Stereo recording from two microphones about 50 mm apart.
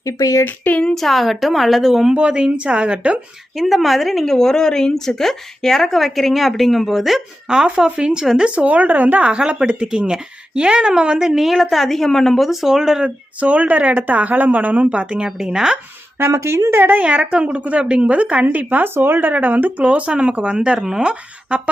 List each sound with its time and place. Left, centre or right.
0.0 s speech: left
0.4 s a sound: left
0.9 s speech: centre
2.1 s a woman's voice: right
3.6 s speech: centre
7.4 s a woman's voice: centre
11.3 s speech: centre
13.1 s speech: right
16.3 s speech: right
17.0 s a woman's voice: right
18.9 s speech: right
19.3 s speech: right
19.8 s a woman's voice: right; by 21.1 s centre